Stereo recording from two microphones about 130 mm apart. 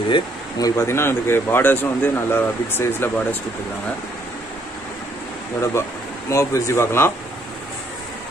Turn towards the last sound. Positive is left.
turn(degrees=20)  # may be behind; listen again after turning